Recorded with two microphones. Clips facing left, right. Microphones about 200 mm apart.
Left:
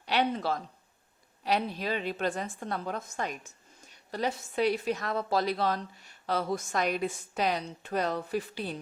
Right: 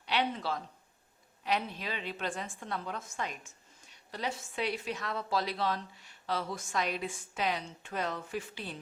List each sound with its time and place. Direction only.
0.0 s a woman's voice: 45° left (ahead or behind)